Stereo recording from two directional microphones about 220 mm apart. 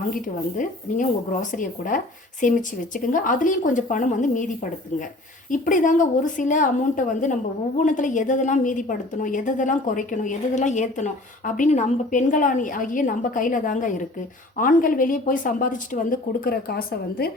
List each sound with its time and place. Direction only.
0.6 s a woman's voice: 35° left (ahead or behind)